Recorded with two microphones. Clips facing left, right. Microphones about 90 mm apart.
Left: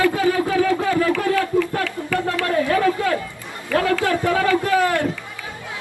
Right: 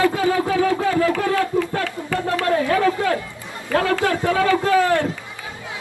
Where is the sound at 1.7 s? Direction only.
30° right (ahead or behind).